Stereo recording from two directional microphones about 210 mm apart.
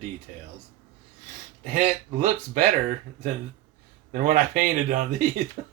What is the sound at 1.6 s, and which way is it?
A man's voice, 35° right (ahead or behind).